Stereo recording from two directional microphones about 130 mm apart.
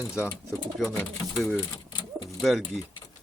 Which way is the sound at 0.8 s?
Centre (ahead or behind).